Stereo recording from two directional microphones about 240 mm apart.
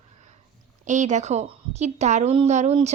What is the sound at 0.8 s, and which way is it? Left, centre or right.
A woman's voice, right.